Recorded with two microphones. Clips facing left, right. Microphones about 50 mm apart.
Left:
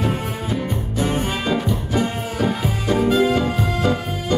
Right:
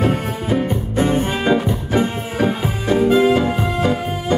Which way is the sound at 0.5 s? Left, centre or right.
Right.